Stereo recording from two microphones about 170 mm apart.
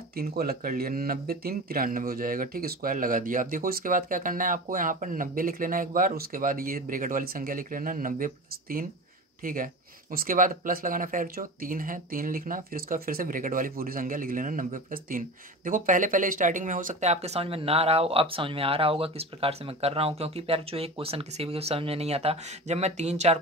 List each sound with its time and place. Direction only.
0.1 s speech: 60° right (ahead or behind); by 23.4 s 40° right (ahead or behind)